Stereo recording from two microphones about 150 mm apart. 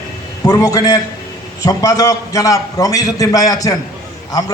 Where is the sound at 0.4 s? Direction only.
25° left (ahead or behind).